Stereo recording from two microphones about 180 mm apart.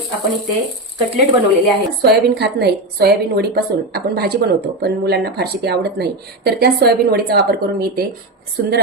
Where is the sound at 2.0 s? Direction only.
65° right (ahead or behind).